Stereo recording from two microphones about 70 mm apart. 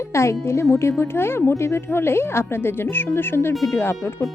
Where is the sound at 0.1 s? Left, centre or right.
Left.